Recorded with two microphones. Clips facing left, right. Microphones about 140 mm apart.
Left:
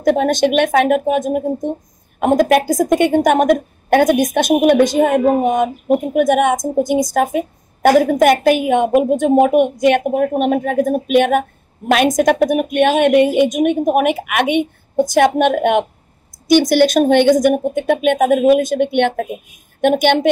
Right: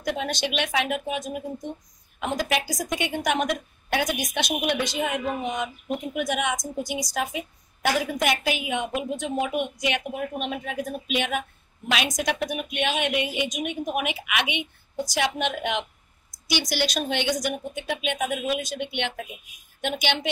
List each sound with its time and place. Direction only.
0.0 s speech: 50° left (ahead or behind)